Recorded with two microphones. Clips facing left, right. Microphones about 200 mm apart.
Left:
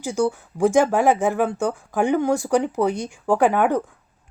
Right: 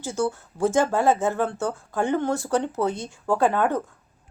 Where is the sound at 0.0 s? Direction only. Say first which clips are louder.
Left 4 dB; 15° left (ahead or behind).